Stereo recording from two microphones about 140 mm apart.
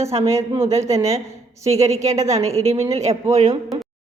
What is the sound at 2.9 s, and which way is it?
Speech, 50° right (ahead or behind).